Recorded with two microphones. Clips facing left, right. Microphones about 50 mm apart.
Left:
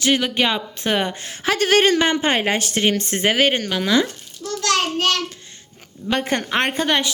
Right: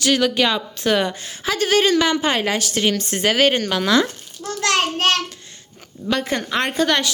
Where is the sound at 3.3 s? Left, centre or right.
Centre.